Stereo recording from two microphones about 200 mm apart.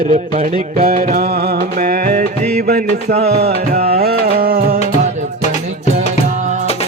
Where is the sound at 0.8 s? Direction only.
45° right (ahead or behind).